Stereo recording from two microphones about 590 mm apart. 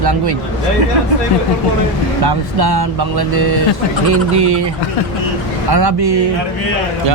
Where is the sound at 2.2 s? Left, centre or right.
Right.